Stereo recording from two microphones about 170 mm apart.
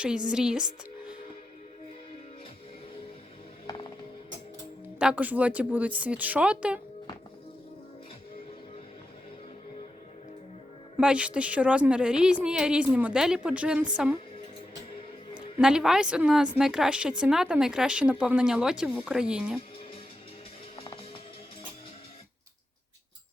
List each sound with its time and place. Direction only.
0.0 s speech: 5° right (ahead or behind)
4.9 s a woman's voice: 10° right (ahead or behind)
10.9 s a woman's voice: 5° right (ahead or behind)
15.5 s speech: 5° right (ahead or behind)
20.7 s music: 30° left (ahead or behind)